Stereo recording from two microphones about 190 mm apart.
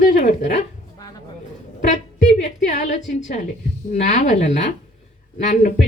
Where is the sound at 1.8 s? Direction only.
40° left (ahead or behind).